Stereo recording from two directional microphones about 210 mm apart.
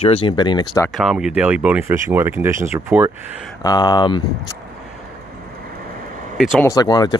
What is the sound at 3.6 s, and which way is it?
Speech, 20° left (ahead or behind).